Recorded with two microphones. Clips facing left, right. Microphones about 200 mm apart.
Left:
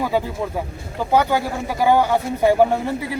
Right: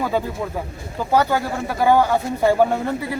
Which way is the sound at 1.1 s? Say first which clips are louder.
Even; 15° left (ahead or behind).